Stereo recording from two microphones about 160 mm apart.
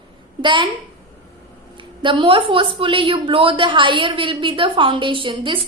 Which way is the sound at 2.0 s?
30° right (ahead or behind).